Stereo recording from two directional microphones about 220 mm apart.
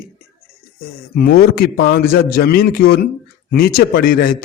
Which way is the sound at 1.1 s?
45° left (ahead or behind).